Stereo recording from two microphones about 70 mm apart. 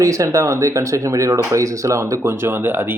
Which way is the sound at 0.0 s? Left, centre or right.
Right.